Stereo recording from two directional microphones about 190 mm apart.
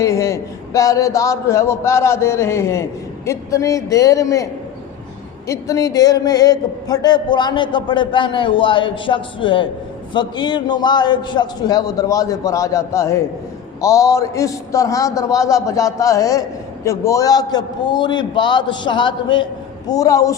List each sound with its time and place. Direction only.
0.0 s a man's voice: 15° left (ahead or behind)
5.5 s a man's voice: 15° left (ahead or behind)